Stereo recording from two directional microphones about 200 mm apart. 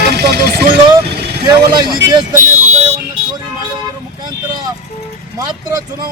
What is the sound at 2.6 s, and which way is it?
Car alarm, 30° right (ahead or behind).